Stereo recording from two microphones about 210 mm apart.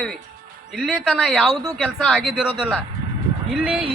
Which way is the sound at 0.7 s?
Centre (ahead or behind).